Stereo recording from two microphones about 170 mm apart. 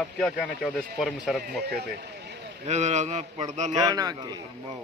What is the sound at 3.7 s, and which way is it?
Speech, 20° right (ahead or behind).